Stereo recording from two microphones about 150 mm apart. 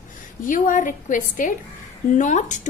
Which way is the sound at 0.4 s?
60° left (ahead or behind).